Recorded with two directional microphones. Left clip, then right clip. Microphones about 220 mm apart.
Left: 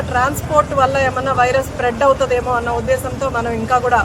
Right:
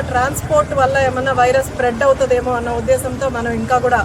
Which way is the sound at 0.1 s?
Centre (ahead or behind).